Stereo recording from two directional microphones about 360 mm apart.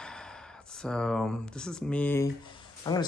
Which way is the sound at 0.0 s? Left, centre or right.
Centre.